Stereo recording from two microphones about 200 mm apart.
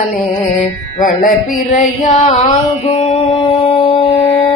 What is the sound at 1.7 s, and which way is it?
Mantra, 35° left (ahead or behind).